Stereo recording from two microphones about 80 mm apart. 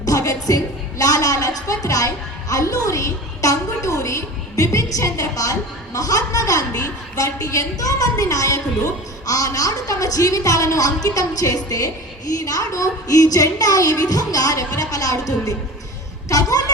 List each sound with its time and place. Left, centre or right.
0.0 s a woman's voice: left